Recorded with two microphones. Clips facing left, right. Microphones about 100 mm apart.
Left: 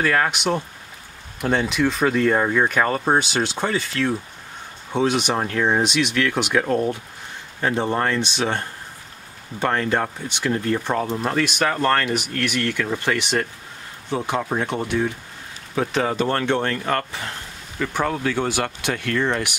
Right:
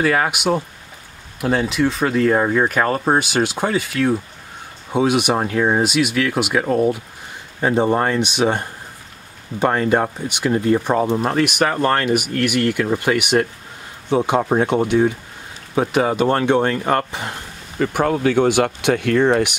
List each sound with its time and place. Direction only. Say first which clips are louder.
0.0 s speech: right 3 dB; 10° right (ahead or behind)